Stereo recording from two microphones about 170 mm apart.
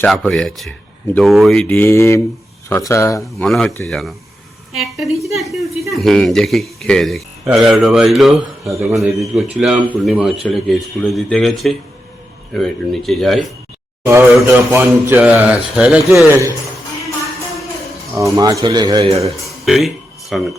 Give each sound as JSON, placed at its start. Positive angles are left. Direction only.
{"t": 0.0, "sound": "speech", "side_deg": 5}
{"t": 3.4, "sound": "speech", "side_deg": 0}
{"t": 8.6, "sound": "speech", "side_deg": -20}
{"t": 9.0, "sound": "speech", "side_deg": 0}
{"t": 14.1, "sound": "speech", "side_deg": -15}
{"t": 18.1, "sound": "a man's voice", "side_deg": -20}
{"t": 19.6, "sound": "speech", "side_deg": 0}